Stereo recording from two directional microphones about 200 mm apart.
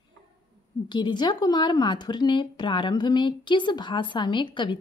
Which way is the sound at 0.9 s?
20° left (ahead or behind).